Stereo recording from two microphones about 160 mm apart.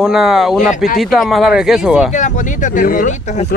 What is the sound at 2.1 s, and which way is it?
Speech, 50° left (ahead or behind).